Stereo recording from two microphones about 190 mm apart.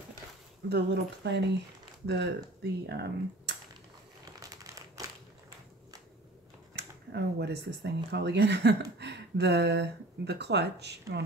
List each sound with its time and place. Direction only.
0.7 s speech: 65° right (ahead or behind)
4.2 s crumpling: 15° right (ahead or behind)
6.7 s speech: 60° right (ahead or behind)